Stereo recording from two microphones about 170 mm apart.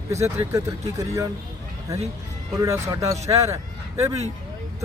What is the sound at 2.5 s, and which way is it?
Speech, 20° right (ahead or behind).